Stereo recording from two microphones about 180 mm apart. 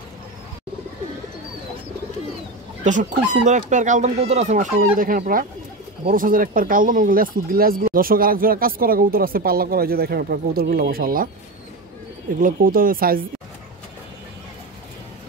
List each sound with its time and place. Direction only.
2.8 s speech: 45° right (ahead or behind)
12.4 s speech: 50° right (ahead or behind)